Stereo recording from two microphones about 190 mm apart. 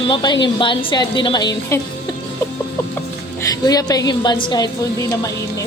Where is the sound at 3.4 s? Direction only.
20° left (ahead or behind).